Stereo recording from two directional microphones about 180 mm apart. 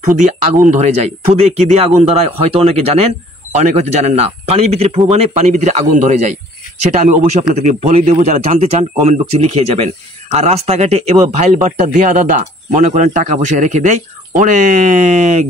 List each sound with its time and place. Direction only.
0.0 s a man's voice: 40° right (ahead or behind)